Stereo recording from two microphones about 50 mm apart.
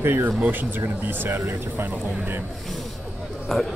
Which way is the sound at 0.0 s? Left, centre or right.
Right.